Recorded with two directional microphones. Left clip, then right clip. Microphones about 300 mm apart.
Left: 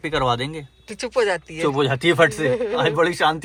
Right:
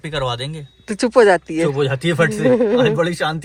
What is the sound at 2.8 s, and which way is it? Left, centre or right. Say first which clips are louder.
Speech: right 1 dB; centre.